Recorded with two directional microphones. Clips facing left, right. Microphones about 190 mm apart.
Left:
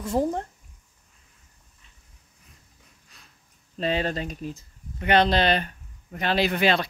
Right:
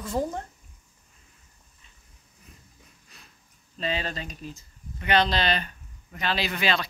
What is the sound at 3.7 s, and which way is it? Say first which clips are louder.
Speech: left 5 dB; 55° left (ahead or behind).